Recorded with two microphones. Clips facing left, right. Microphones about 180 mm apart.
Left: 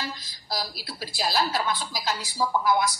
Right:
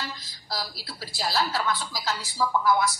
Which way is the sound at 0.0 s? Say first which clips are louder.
Left 2 dB; 15° left (ahead or behind).